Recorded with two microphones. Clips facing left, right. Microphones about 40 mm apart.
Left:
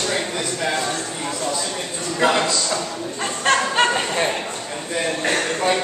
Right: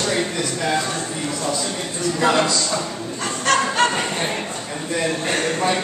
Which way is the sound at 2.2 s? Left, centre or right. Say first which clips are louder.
Left 1 dB; left.